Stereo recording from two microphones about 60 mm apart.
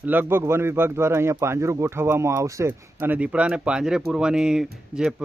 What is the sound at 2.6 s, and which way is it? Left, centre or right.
Speech, right.